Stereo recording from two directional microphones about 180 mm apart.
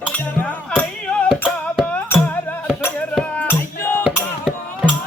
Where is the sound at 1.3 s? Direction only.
5° right (ahead or behind).